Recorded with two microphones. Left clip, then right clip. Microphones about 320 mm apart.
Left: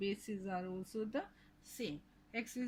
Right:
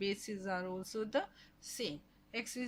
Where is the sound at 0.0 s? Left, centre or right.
Centre.